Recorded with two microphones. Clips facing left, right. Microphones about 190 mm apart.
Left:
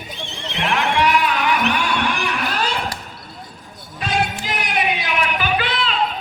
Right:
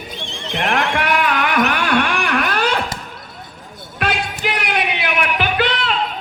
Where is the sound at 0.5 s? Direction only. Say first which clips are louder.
Right 1 dB; 50° right (ahead or behind).